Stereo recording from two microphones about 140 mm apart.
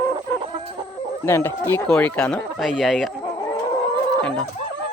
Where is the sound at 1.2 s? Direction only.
20° left (ahead or behind); by 3.1 s centre (ahead or behind).